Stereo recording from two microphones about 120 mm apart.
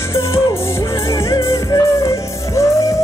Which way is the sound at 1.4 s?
25° left (ahead or behind).